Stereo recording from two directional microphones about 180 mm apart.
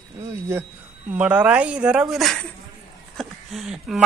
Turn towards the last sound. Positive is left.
turn(degrees=0)  # may be behind; listen again after turning